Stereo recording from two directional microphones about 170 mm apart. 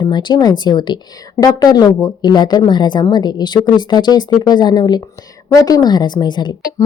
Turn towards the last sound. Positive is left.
turn(degrees=25)  # may be behind; listen again after turning